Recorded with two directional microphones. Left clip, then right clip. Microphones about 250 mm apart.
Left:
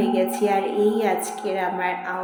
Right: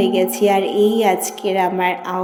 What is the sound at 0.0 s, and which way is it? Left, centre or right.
A woman's voice, right.